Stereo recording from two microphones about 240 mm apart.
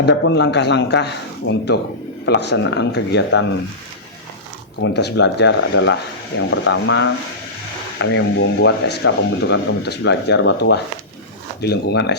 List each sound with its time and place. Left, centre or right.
0.0 s speech: left
4.8 s speech: left